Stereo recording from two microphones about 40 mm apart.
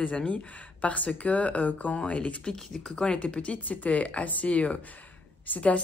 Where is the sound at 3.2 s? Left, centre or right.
Left.